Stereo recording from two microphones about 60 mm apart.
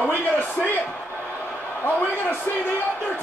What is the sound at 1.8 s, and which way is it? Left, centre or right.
Speech, left.